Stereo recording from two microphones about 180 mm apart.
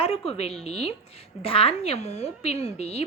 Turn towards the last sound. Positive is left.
turn(degrees=35)  # may be behind; listen again after turning